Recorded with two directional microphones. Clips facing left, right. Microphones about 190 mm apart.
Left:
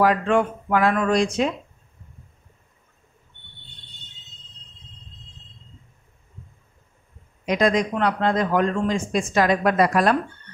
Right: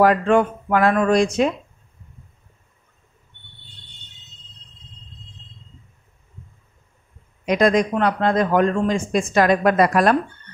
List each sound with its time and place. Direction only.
0.0 s speech: 50° right (ahead or behind)
7.4 s speech: 50° right (ahead or behind)